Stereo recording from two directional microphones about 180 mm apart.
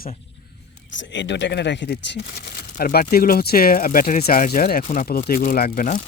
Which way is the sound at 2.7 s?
50° left (ahead or behind).